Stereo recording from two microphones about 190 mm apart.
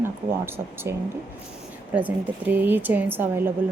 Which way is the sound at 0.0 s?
10° right (ahead or behind).